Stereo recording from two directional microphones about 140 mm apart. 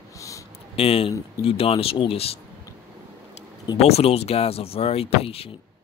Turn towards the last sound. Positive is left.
turn(degrees=45)  # may be behind; listen again after turning